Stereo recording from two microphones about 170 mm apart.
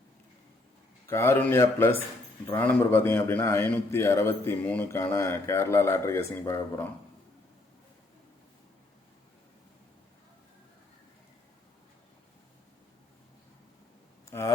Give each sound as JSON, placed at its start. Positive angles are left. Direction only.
{"t": 1.0, "sound": "a man's voice", "side_deg": 15}
{"t": 14.3, "sound": "speech", "side_deg": 15}